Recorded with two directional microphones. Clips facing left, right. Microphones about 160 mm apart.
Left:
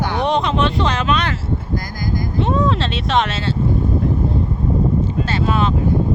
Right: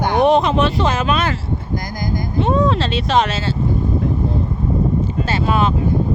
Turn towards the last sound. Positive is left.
turn(degrees=-10)  # may be behind; listen again after turning